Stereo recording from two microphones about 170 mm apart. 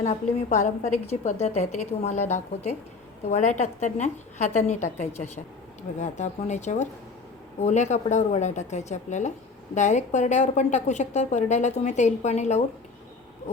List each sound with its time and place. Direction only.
0.0 s a woman's voice: 45° left (ahead or behind)